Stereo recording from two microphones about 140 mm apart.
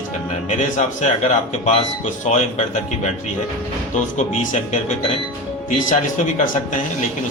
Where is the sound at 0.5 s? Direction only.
55° left (ahead or behind).